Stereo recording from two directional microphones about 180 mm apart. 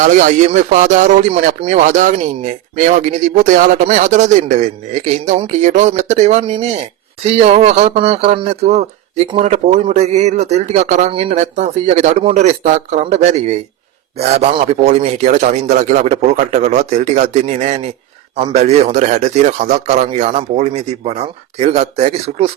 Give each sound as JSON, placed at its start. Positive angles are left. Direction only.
{"t": 0.0, "sound": "speech", "side_deg": -45}